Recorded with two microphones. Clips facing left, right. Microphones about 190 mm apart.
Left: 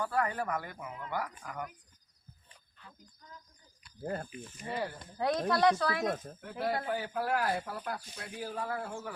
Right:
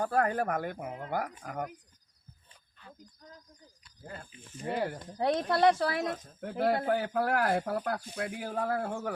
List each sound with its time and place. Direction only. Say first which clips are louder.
0.0 s speech: right 4 dB; 50° right (ahead or behind)
4.0 s speech: left 9 dB; 45° left (ahead or behind)
4.6 s speech: right 4 dB; 55° right (ahead or behind)
5.1 s speech: right 1 dB; 25° right (ahead or behind)
6.4 s speech: right 7 dB; 60° right (ahead or behind)